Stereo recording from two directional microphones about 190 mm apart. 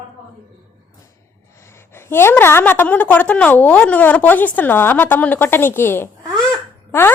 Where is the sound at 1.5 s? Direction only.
15° left (ahead or behind).